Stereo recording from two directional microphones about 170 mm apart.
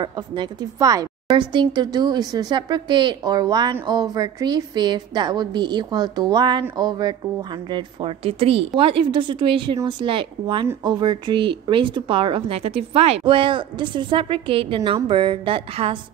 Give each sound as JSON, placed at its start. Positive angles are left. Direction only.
{"t": 0.0, "sound": "a woman's voice", "side_deg": -25}
{"t": 14.8, "sound": "speech", "side_deg": -20}
{"t": 15.0, "sound": "a woman's voice", "side_deg": -30}